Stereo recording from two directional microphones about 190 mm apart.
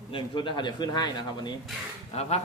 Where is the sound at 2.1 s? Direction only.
35° left (ahead or behind).